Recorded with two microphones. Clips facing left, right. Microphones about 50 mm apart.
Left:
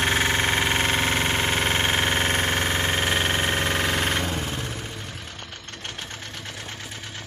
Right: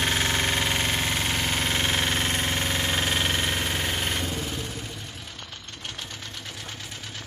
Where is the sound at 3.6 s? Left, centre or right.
Left.